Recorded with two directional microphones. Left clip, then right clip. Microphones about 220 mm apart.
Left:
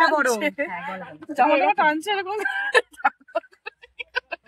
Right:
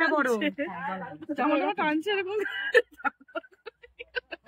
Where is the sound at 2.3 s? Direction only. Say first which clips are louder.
Left 4 dB; 5° right (ahead or behind).